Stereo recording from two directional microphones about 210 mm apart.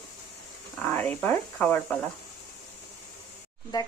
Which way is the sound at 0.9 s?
10° left (ahead or behind).